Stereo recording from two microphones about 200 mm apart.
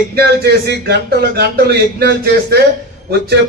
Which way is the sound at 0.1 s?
55° right (ahead or behind).